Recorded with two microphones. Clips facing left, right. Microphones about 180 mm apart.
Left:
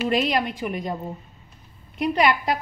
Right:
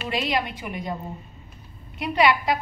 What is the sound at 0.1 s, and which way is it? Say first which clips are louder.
Speech: left 4 dB; 45° left (ahead or behind).